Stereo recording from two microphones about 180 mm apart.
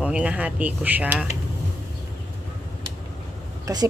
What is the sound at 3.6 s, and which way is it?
Speech, 20° right (ahead or behind).